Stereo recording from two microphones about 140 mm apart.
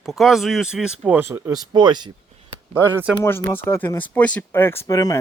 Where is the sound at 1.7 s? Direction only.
30° right (ahead or behind).